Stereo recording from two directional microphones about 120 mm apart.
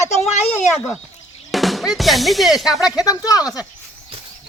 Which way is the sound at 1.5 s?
Centre (ahead or behind).